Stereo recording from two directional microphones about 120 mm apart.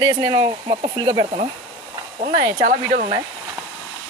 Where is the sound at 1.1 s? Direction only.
55° right (ahead or behind).